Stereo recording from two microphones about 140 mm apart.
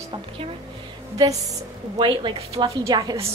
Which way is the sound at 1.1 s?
25° right (ahead or behind).